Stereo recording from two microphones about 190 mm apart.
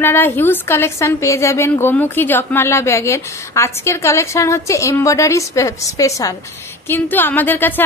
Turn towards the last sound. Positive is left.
turn(degrees=10)  # may be behind; listen again after turning